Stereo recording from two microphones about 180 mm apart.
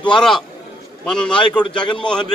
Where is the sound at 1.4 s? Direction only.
25° left (ahead or behind).